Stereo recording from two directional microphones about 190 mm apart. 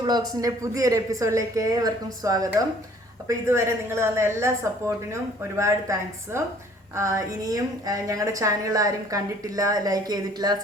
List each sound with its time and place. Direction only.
0.0 s a woman's voice: 20° right (ahead or behind)